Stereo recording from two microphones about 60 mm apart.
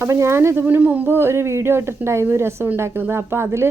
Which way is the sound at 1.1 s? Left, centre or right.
Right.